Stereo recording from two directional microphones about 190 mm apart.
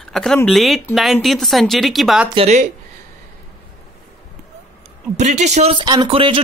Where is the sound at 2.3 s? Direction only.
35° right (ahead or behind).